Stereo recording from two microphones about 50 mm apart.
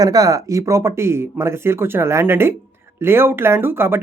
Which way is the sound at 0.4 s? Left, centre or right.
Right.